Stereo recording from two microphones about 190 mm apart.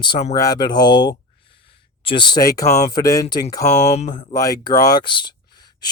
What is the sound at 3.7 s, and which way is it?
Speech, 35° left (ahead or behind).